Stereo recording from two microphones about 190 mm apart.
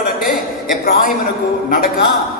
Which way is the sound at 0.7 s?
50° left (ahead or behind).